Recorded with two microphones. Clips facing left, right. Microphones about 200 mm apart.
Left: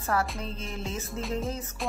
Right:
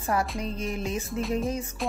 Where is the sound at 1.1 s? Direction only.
Centre (ahead or behind).